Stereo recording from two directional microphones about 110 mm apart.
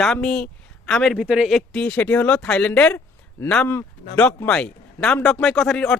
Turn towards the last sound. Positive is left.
turn(degrees=0)  # may be behind; listen again after turning